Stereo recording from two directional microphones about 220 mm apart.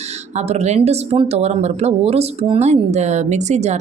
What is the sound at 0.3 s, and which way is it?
A woman's voice, 30° right (ahead or behind).